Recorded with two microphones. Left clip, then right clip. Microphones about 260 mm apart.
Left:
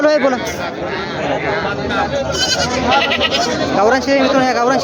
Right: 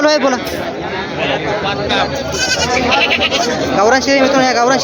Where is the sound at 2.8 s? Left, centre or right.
Centre.